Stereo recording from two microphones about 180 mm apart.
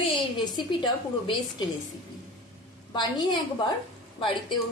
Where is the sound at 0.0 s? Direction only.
25° left (ahead or behind).